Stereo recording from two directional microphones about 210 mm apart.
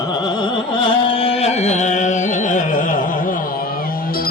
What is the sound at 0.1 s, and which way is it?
Carnatic music, 20° left (ahead or behind).